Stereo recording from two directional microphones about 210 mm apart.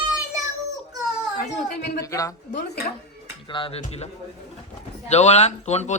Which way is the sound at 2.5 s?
50° left (ahead or behind).